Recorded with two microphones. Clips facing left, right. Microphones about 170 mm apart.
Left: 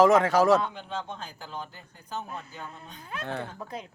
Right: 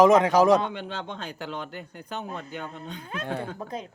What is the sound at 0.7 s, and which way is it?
Speech, 85° right.